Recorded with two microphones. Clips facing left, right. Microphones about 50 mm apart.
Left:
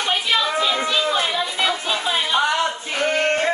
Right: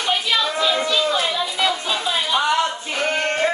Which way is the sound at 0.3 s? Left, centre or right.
Centre.